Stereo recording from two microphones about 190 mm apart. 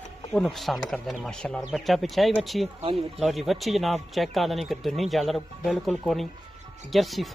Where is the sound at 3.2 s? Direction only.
Centre (ahead or behind).